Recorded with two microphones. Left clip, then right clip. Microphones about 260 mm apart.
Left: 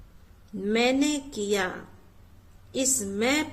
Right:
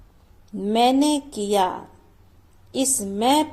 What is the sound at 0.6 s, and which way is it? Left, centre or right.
A woman's voice, centre.